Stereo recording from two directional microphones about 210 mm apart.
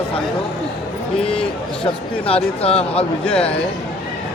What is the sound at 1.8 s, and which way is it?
Speech, 25° left (ahead or behind).